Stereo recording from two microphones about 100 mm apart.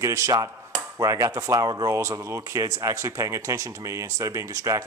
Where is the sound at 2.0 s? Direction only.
30° right (ahead or behind).